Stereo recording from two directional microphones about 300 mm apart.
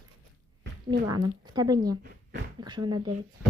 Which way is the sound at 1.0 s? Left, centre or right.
Centre.